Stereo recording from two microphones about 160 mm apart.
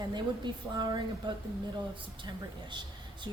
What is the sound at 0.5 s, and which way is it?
Speech, 30° right (ahead or behind).